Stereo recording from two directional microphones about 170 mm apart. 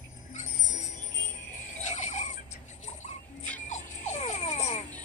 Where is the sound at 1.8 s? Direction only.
45° left (ahead or behind).